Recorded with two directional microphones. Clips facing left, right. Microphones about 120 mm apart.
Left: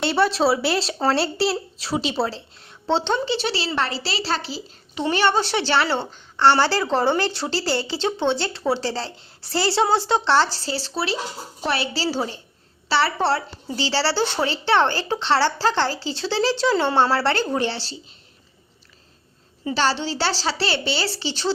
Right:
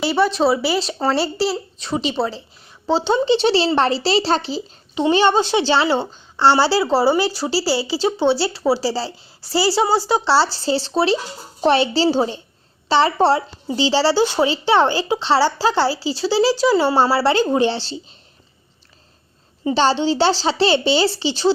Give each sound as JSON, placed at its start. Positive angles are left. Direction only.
{"t": 0.0, "sound": "speech", "side_deg": 0}
{"t": 3.1, "sound": "a woman's voice", "side_deg": -25}
{"t": 19.6, "sound": "speech", "side_deg": -20}